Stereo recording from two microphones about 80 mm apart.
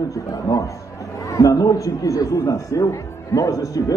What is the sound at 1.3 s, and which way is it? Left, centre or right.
A man's voice, left.